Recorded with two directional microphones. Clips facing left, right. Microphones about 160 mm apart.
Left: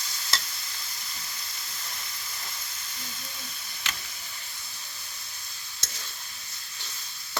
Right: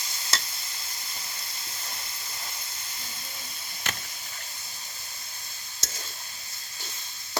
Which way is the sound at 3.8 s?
50° right (ahead or behind).